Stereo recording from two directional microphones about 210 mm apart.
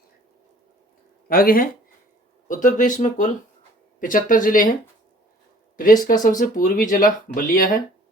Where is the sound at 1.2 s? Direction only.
45° left (ahead or behind).